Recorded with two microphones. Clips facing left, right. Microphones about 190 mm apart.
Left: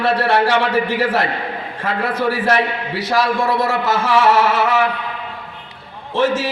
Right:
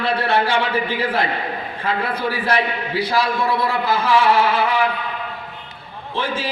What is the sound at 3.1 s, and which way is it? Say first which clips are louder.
A man's voice: left 4 dB; 85° left.